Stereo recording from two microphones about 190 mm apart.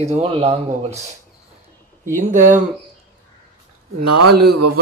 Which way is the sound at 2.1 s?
45° right (ahead or behind).